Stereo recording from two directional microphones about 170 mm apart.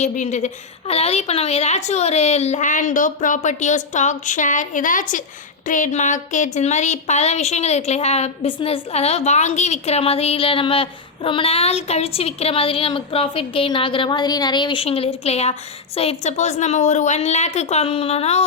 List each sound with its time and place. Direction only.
0.0 s a woman's voice: 45° left (ahead or behind)